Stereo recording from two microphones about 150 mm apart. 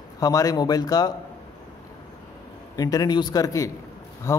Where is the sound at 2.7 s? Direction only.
25° left (ahead or behind).